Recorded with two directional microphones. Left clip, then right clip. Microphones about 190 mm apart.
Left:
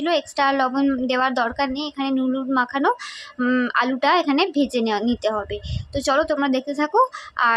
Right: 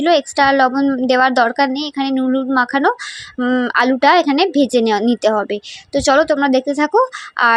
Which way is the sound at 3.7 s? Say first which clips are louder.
Right 8 dB; 25° right (ahead or behind).